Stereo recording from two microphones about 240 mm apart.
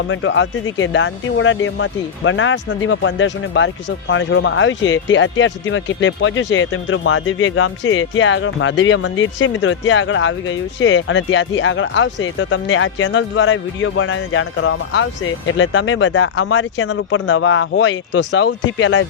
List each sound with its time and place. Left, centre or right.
0.1 s speech: left